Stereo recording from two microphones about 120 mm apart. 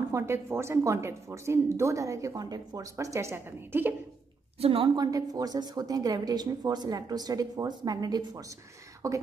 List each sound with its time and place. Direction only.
0.1 s a woman's voice: 20° right (ahead or behind)
4.6 s a woman's voice: 50° right (ahead or behind)
4.9 s a woman's voice: 30° right (ahead or behind)